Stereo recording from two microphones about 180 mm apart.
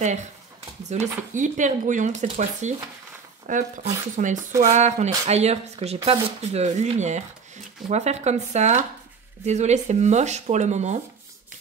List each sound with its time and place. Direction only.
0.0 s speech: 40° right (ahead or behind)